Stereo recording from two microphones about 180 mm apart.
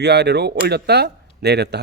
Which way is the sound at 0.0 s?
65° right (ahead or behind).